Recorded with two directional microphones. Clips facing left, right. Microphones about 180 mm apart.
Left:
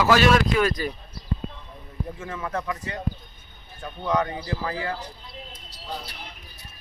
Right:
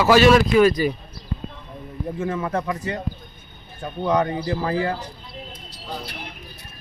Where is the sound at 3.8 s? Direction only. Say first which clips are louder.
Right 4 dB; 35° right (ahead or behind).